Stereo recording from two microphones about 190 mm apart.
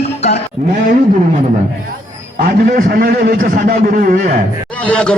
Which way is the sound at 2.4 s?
50° right (ahead or behind).